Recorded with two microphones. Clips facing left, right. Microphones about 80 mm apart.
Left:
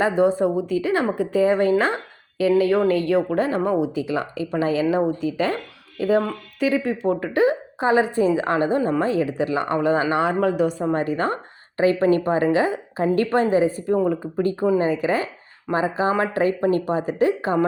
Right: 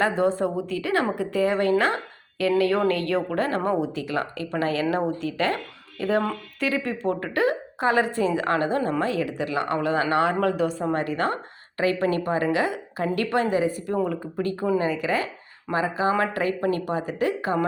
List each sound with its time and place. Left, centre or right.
0.0 s a woman's voice: centre
9.0 s a woman's voice: left